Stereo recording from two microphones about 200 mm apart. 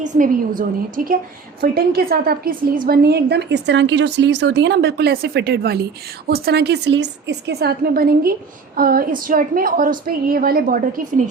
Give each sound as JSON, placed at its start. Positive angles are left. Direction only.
{"t": 0.0, "sound": "a woman's voice", "side_deg": -40}